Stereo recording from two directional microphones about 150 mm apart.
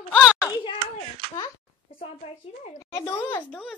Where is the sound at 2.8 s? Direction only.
20° left (ahead or behind).